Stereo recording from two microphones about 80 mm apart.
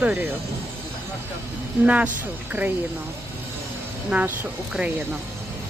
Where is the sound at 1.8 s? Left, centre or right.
Centre.